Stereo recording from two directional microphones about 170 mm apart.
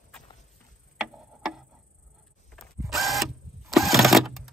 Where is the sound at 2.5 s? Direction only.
5° left (ahead or behind).